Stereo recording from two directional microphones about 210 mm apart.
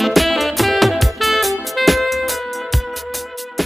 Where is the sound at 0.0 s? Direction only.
Centre (ahead or behind).